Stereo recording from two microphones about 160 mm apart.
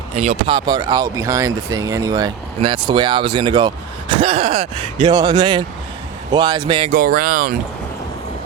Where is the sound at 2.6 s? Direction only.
35° right (ahead or behind).